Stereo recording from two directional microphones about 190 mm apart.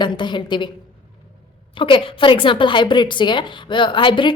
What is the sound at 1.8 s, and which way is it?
A woman's voice, 25° left (ahead or behind).